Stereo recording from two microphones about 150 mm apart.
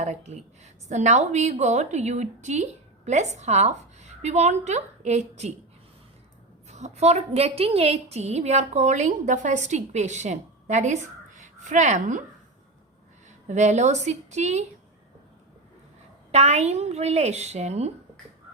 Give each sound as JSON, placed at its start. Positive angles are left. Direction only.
{"t": 0.0, "sound": "a woman's voice", "side_deg": -50}
{"t": 6.7, "sound": "a woman's voice", "side_deg": -50}
{"t": 13.5, "sound": "a woman's voice", "side_deg": -50}
{"t": 16.3, "sound": "a woman's voice", "side_deg": -45}